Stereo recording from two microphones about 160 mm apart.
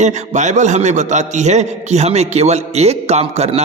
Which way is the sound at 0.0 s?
45° right (ahead or behind).